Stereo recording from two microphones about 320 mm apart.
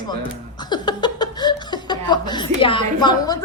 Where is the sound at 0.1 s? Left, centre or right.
Centre.